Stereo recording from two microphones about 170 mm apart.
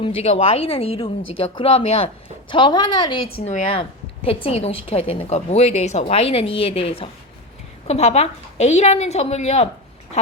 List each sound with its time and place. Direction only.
0.0 s a woman's voice: 35° left (ahead or behind)
3.4 s a woman's voice: 35° left (ahead or behind)